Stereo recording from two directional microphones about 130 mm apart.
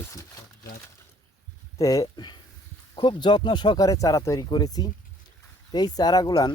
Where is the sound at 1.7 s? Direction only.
25° left (ahead or behind).